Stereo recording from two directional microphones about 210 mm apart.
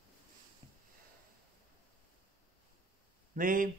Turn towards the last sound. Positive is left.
turn(degrees=-40)  # may be behind; listen again after turning